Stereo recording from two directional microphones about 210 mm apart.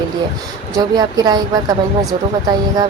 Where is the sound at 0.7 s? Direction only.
15° right (ahead or behind).